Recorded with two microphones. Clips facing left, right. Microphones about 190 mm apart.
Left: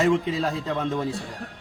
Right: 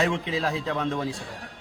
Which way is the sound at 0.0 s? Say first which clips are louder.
Left 4 dB; centre (ahead or behind).